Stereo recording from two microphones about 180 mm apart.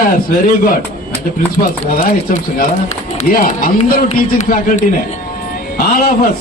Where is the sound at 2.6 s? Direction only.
45° left (ahead or behind).